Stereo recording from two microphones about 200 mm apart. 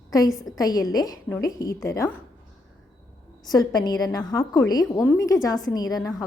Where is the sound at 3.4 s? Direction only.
20° left (ahead or behind).